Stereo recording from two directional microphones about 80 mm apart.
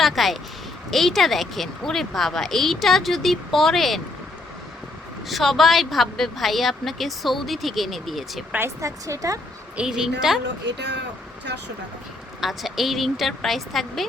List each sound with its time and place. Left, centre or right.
0.0 s a woman's voice: centre
5.3 s a woman's voice: centre
8.8 s speech: right
9.7 s a woman's voice: centre
12.4 s a woman's voice: centre